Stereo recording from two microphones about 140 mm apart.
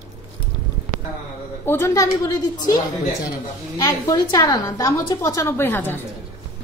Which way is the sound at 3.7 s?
25° left (ahead or behind).